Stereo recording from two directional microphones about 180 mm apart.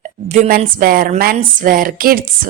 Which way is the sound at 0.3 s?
45° right (ahead or behind).